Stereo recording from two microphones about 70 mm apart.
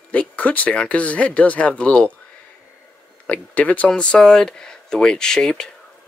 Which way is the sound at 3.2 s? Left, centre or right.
Centre.